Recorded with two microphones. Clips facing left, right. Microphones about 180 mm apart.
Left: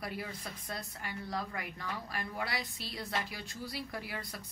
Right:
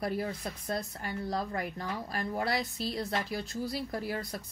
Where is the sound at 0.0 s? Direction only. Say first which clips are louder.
Right 8 dB; 45° right (ahead or behind).